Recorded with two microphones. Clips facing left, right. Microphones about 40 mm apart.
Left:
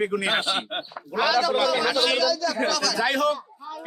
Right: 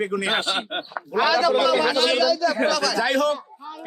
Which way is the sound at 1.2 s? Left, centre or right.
Right.